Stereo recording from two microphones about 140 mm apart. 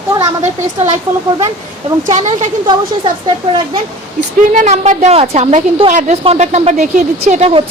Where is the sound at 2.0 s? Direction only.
60° right (ahead or behind).